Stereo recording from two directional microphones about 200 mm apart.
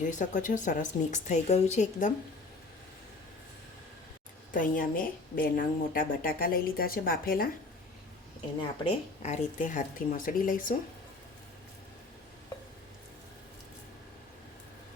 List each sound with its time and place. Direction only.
0.1 s a woman's voice: 40° left (ahead or behind)
4.5 s a woman's voice: 40° left (ahead or behind)
8.8 s a woman's voice: 35° left (ahead or behind)